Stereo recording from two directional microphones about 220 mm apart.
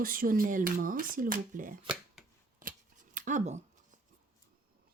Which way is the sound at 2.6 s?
40° right (ahead or behind).